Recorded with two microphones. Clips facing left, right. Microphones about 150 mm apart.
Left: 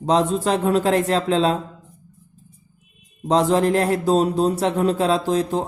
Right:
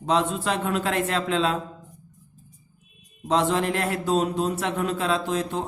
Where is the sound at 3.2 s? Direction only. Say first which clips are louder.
Left 5 dB; 35° left (ahead or behind).